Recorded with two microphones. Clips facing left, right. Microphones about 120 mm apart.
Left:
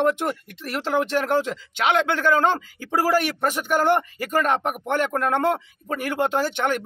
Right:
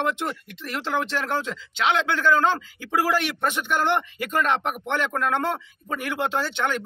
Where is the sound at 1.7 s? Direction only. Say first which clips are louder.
Left 2 dB; 55° left (ahead or behind).